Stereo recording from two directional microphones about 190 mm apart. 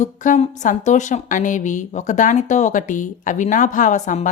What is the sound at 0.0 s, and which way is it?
A woman's voice, 40° left (ahead or behind).